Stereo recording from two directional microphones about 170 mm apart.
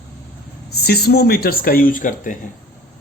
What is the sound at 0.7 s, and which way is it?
Speech, 65° left (ahead or behind).